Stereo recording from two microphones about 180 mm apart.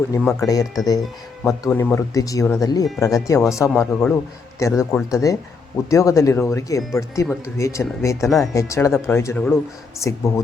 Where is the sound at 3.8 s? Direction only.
5° left (ahead or behind).